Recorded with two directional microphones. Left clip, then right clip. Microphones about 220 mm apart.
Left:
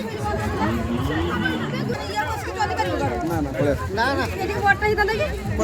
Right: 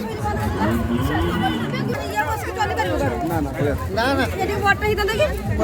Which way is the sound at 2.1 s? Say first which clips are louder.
Right 2 dB; centre (ahead or behind).